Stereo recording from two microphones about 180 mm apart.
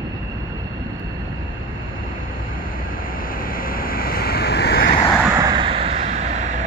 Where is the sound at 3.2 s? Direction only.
50° left (ahead or behind).